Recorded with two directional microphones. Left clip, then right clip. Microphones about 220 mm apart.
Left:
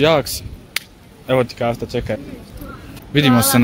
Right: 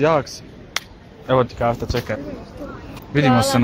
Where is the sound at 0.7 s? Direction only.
20° left (ahead or behind).